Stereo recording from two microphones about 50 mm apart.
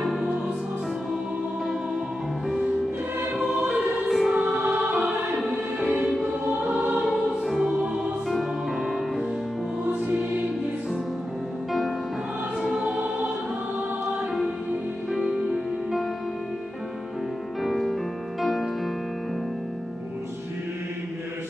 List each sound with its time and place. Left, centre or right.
0.0 s music: centre
4.1 s music: centre
4.4 s choir: right
4.9 s music: centre
5.4 s music: centre
5.9 s choir: centre
7.2 s music: centre
7.8 s music: centre
8.3 s music: centre
10.0 s music: right
12.6 s music: centre
15.5 s music: centre
17.6 s music: centre